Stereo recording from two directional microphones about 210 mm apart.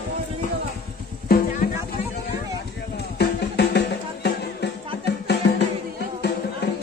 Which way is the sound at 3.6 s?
50° left (ahead or behind).